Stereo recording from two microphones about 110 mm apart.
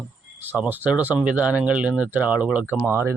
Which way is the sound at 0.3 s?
15° right (ahead or behind).